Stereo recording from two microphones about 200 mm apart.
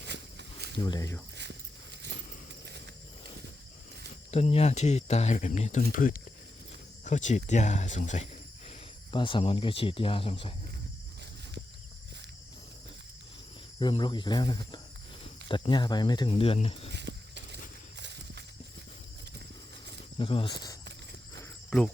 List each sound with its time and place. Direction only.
0.0 s a sound: 60° right (ahead or behind)
0.8 s speech: 20° left (ahead or behind)
4.3 s speech: 30° left (ahead or behind)
9.1 s speech: 25° left (ahead or behind)
13.7 s speech: 25° left (ahead or behind)
16.9 s a sound: 60° right (ahead or behind)
18.0 s horse: 60° right (ahead or behind)
20.1 s speech: 25° left (ahead or behind)